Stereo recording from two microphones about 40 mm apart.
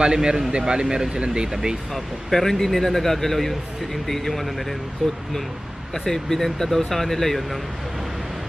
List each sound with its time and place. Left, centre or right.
0.0 s a man's voice: centre
1.9 s speech: centre